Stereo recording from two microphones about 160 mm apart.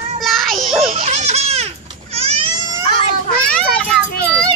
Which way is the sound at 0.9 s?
45° right (ahead or behind).